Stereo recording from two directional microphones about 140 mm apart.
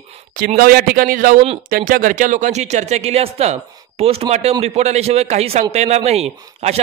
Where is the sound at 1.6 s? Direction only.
80° right.